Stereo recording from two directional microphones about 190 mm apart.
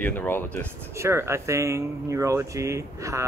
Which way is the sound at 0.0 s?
10° left (ahead or behind).